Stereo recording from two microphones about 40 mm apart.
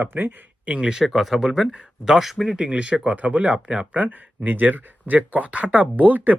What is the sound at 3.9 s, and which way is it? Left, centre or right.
Speech, right.